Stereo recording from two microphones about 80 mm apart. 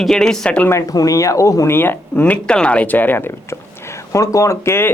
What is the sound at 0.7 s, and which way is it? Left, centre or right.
Speech, left.